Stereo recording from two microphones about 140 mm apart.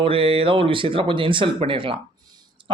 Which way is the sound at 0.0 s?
40° right (ahead or behind).